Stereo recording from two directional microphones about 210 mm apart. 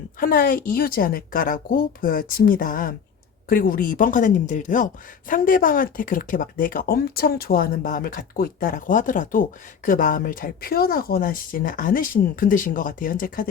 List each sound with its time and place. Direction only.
0.2 s a woman's voice: 45° left (ahead or behind)